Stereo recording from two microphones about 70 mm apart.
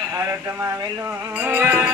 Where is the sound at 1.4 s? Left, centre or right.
Right.